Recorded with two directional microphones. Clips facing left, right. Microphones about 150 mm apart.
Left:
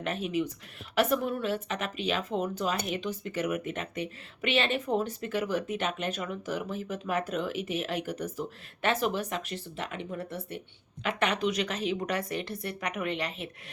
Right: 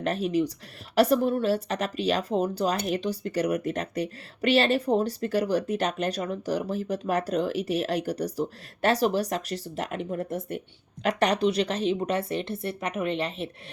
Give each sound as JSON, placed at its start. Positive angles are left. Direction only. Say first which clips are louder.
{"t": 0.0, "sound": "a woman's voice", "louder": "right 5 dB", "side_deg": -40}